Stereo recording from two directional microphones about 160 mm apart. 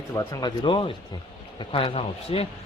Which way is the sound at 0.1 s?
20° left (ahead or behind).